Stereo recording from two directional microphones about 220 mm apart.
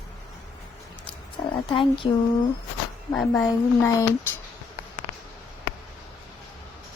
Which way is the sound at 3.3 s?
10° left (ahead or behind).